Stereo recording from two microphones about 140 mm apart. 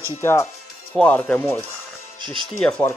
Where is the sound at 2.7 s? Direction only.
10° left (ahead or behind).